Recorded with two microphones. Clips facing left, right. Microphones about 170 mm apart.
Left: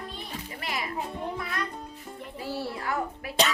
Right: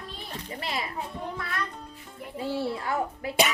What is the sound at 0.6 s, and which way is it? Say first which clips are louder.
Speech: right 1 dB; 25° right (ahead or behind).